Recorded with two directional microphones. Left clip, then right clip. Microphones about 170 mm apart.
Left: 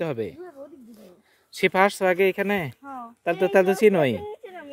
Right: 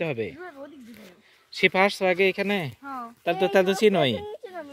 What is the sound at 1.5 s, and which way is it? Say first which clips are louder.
Speech: left 1 dB; 15° left (ahead or behind).